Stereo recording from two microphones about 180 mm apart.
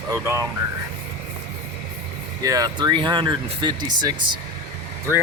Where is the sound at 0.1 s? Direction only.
15° right (ahead or behind).